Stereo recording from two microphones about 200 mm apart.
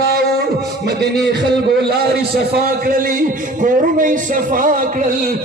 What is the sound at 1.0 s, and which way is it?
A man's voice, 55° right (ahead or behind).